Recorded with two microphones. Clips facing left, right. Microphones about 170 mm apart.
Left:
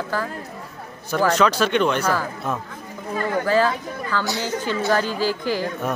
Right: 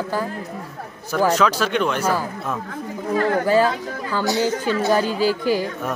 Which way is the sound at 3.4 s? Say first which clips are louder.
Right 2 dB; 15° right (ahead or behind).